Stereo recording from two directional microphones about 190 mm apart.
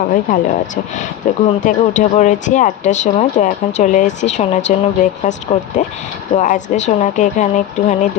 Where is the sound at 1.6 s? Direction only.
40° left (ahead or behind).